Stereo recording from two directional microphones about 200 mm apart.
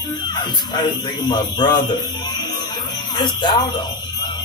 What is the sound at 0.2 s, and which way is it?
Speech, 20° left (ahead or behind).